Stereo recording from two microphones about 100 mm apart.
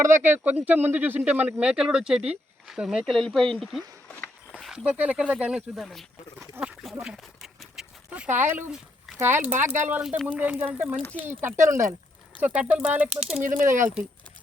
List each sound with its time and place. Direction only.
0.0 s speech: 25° right (ahead or behind); by 3.8 s 5° left (ahead or behind)
4.1 s walk: 15° left (ahead or behind)
4.6 s speech: 5° right (ahead or behind)
5.7 s speech: centre (ahead or behind)
6.6 s speech: 20° right (ahead or behind)
7.0 s dog: 5° right (ahead or behind)
8.3 s speech: 20° right (ahead or behind)
11.0 s speech: 15° left (ahead or behind)
11.3 s speech: 25° right (ahead or behind)
12.4 s speech: 15° right (ahead or behind)
13.5 s speech: 25° right (ahead or behind)